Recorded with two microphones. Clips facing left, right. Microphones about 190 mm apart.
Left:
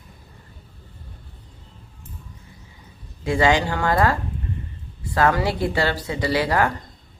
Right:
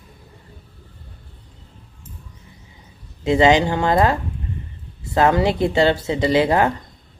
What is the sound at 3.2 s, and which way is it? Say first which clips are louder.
Speech: right 4 dB; 20° right (ahead or behind).